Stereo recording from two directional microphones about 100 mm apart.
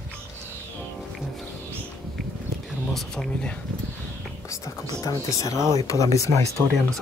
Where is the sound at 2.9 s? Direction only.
5° left (ahead or behind).